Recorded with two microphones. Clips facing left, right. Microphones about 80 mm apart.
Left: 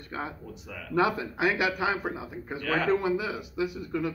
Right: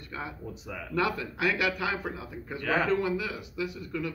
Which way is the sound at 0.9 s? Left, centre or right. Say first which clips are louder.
Left 4 dB; centre.